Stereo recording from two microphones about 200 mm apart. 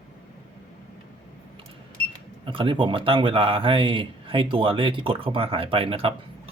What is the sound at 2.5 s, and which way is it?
Speech, 25° right (ahead or behind).